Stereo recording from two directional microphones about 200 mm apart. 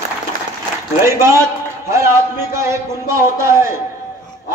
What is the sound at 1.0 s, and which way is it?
Speech, 15° right (ahead or behind).